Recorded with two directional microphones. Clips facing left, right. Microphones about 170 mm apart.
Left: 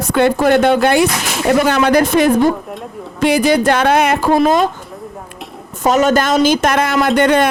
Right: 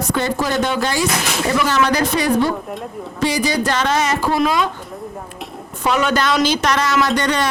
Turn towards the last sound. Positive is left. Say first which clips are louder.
# left 6 dB
turn(degrees=55)  # may be behind; listen again after turning